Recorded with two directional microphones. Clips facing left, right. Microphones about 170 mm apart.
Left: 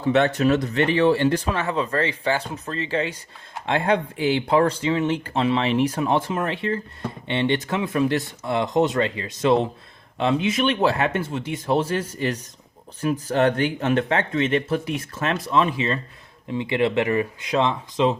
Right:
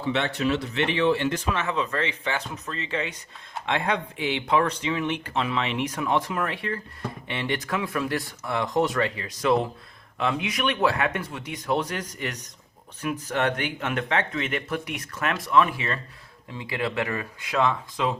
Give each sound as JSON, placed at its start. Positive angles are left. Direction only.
{"t": 0.0, "sound": "speech", "side_deg": 45}